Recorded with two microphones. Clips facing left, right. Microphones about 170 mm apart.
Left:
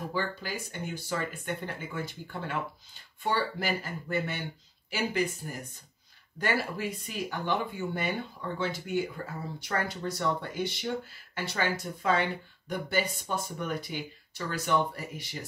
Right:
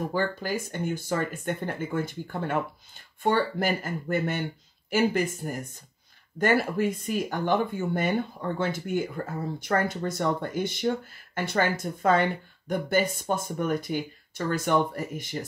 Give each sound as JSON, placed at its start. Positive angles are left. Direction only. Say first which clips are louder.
{"t": 0.1, "sound": "speech", "louder": "right 6 dB", "side_deg": -50}